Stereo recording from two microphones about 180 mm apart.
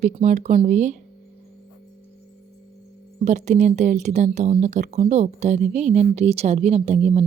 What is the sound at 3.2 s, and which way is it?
Speech, 40° right (ahead or behind).